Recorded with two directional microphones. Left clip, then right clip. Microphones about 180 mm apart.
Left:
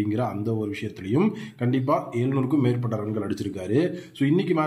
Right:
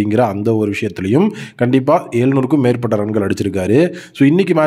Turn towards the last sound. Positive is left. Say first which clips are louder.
# right 11 dB
turn(degrees=-60)  # may be behind; listen again after turning